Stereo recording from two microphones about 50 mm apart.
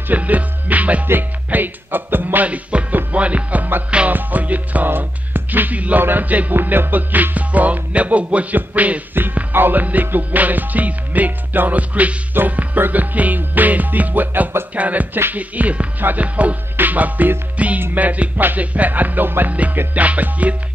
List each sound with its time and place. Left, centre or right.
0.1 s music: right
1.5 s music: right
2.4 s speech: right
4.1 s music: right
6.5 s music: right
9.1 s music: right
15.3 s speech: right
16.7 s music: right
19.5 s speech: right
19.9 s music: right